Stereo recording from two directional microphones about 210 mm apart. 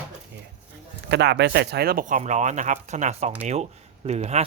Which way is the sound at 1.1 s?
55° right (ahead or behind).